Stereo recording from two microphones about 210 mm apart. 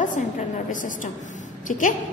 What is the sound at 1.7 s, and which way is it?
Speech, 40° left (ahead or behind).